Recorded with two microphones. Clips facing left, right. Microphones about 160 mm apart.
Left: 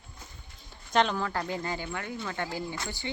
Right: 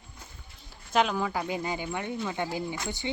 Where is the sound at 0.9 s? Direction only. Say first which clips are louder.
Even; 5° right (ahead or behind).